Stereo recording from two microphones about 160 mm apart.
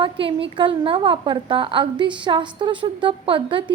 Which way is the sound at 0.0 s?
35° right (ahead or behind).